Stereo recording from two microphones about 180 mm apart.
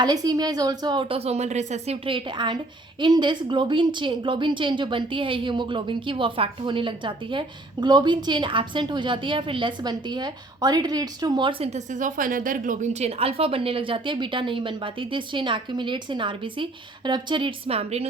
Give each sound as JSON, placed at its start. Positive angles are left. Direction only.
{"t": 0.0, "sound": "a woman's voice", "side_deg": -20}